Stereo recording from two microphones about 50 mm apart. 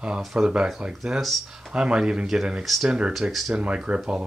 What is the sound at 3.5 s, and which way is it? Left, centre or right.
Speech, right.